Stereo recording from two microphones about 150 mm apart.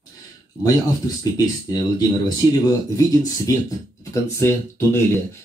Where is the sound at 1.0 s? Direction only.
25° left (ahead or behind).